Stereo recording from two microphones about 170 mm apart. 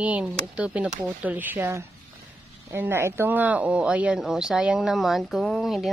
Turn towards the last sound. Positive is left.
turn(degrees=0)  # may be behind; listen again after turning